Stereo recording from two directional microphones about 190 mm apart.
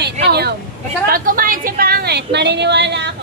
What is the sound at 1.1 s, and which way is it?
A woman's voice, 45° right (ahead or behind).